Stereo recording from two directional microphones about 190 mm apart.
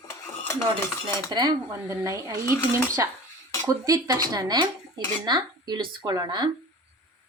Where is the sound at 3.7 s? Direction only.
15° right (ahead or behind).